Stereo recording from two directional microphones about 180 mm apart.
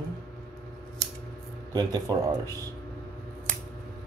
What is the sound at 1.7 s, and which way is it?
Speech, 20° right (ahead or behind).